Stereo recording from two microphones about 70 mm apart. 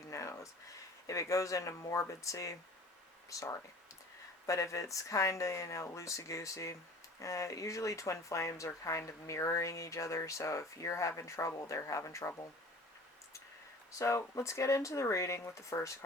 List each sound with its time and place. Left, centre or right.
0.1 s a sound: left
1.0 s speech: left
14.0 s speech: left